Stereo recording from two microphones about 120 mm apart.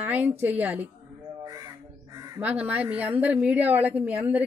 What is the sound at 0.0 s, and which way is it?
Speech, 15° right (ahead or behind).